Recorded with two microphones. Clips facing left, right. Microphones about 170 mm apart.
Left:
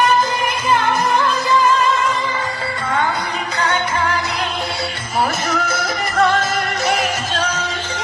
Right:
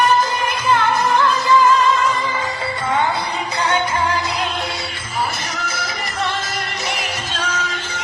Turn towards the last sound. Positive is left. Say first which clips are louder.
# left 5 dB
turn(degrees=40)  # may be behind; listen again after turning